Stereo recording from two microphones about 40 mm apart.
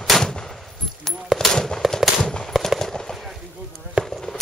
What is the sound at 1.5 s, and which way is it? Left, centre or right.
Fireworks, centre.